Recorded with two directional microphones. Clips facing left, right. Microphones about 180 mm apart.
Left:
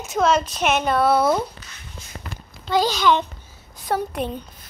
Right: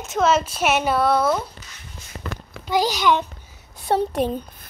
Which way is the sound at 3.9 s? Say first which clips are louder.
Right 3 dB; 25° right (ahead or behind).